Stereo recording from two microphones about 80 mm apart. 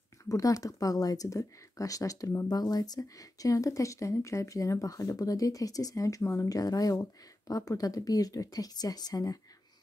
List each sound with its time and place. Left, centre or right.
0.2 s speech: left